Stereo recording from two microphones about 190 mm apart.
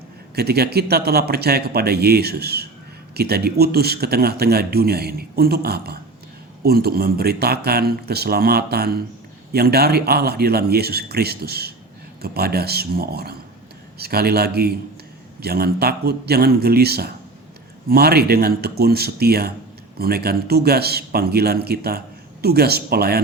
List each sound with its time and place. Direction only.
0.3 s a man's voice: 55° right (ahead or behind)